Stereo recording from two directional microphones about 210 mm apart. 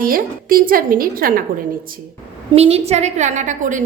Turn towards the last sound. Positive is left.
turn(degrees=-35)  # may be behind; listen again after turning